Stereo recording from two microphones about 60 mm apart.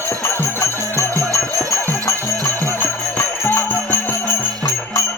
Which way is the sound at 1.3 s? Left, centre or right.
Left.